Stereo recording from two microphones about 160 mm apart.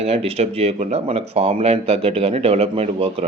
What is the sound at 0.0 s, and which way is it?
A man's voice, 40° right (ahead or behind).